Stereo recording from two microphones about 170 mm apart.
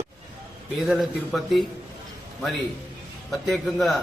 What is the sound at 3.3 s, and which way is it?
Speech, centre (ahead or behind).